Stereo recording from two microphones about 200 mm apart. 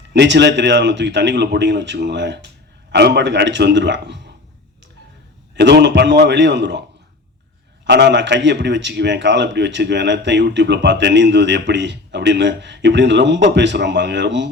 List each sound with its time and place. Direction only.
0.1 s a man's voice: 60° right (ahead or behind)
5.5 s a man's voice: 60° right (ahead or behind)
7.9 s a man's voice: 60° right (ahead or behind)